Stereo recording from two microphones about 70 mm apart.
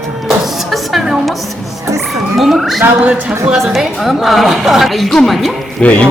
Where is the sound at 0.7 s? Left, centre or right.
Centre.